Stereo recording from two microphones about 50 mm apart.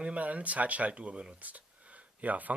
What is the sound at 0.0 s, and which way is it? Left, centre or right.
Speech, right.